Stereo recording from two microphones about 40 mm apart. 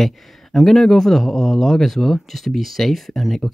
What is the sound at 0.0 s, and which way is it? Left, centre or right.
Speech, centre.